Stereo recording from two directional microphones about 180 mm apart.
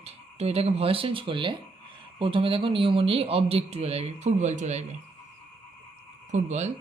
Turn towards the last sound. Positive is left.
turn(degrees=-40)  # may be behind; listen again after turning